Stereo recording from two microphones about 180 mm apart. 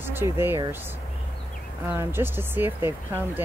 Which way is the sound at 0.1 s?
10° right (ahead or behind).